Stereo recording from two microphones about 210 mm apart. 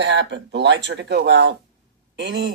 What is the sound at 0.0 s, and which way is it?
Speech, 55° right (ahead or behind).